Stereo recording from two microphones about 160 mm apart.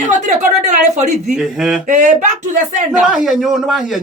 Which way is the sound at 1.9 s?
50° right (ahead or behind).